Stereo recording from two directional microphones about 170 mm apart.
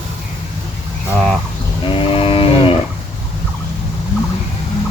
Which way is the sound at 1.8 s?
30° left (ahead or behind).